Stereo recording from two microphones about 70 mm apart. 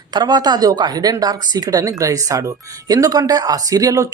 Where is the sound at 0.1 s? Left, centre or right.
Right.